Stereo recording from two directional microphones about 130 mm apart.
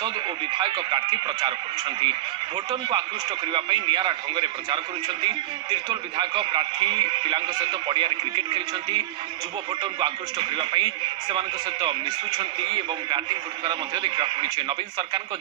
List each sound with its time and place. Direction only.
0.0 s a man's voice: 35° right (ahead or behind)
3.5 s a man's voice: 35° right (ahead or behind)